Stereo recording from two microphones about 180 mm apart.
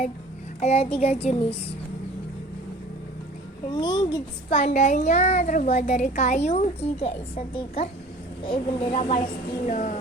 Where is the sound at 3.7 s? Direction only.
25° left (ahead or behind).